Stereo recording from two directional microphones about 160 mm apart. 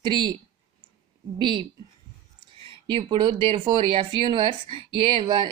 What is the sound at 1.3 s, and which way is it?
Speech, 30° right (ahead or behind).